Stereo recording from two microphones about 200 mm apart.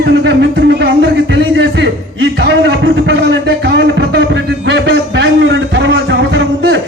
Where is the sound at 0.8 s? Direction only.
60° right (ahead or behind).